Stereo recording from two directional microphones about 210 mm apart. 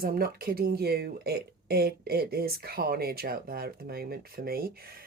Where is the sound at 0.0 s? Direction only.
45° right (ahead or behind).